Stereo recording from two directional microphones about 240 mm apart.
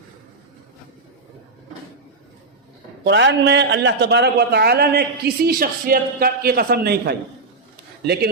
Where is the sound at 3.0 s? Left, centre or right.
Right.